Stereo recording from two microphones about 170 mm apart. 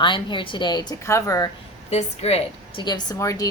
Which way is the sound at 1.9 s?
40° left (ahead or behind).